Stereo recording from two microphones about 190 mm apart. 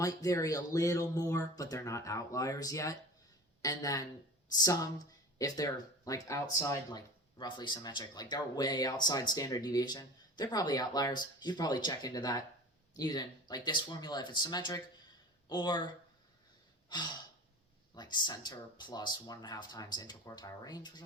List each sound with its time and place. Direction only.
0.0 s speech: 15° left (ahead or behind)
16.9 s speech: 20° left (ahead or behind)